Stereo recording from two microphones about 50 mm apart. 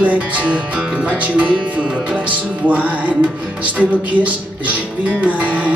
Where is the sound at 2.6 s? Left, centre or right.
Right.